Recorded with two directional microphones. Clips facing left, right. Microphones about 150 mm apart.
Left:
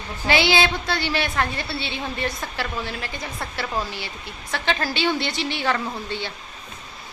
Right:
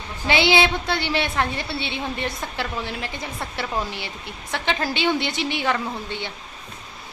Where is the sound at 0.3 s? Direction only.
20° right (ahead or behind).